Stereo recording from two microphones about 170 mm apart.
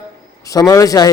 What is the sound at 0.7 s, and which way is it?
Speech, 20° left (ahead or behind).